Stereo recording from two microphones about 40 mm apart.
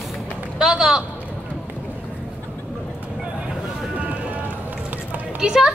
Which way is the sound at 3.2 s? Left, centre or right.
Centre.